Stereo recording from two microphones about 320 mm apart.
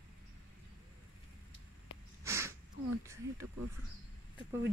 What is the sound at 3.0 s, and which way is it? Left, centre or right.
Speech, centre.